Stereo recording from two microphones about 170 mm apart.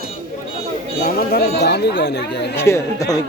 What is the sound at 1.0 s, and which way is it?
Speech, 60° left (ahead or behind).